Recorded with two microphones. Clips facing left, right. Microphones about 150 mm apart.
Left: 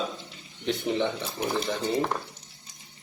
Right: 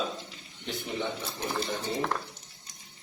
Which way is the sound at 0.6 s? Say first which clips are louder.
Left 7 dB; 75° left (ahead or behind).